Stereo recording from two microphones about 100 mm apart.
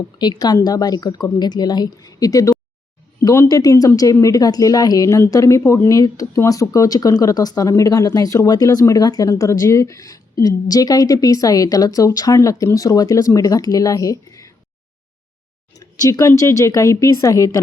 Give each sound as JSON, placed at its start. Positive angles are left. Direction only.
{"t": 0.2, "sound": "speech", "side_deg": 45}
{"t": 15.7, "sound": "speech", "side_deg": 35}